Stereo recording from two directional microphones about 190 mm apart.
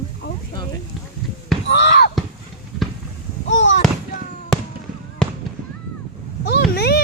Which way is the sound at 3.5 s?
70° left (ahead or behind).